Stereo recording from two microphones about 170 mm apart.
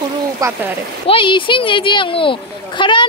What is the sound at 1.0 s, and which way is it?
Speech, 30° left (ahead or behind).